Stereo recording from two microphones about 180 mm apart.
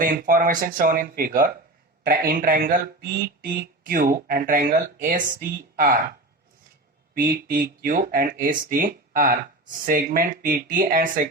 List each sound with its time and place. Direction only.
0.0 s speech: 55° right (ahead or behind)
7.1 s speech: 55° right (ahead or behind)